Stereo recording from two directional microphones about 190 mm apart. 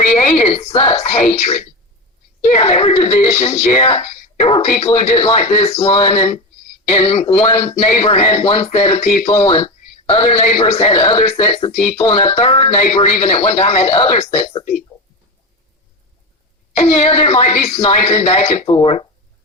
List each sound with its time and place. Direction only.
0.4 s speech: 30° left (ahead or behind)
16.7 s speech: 35° left (ahead or behind)